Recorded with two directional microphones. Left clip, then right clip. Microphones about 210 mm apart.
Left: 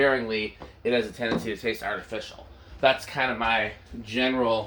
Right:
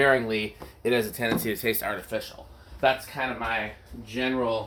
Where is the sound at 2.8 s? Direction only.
15° right (ahead or behind).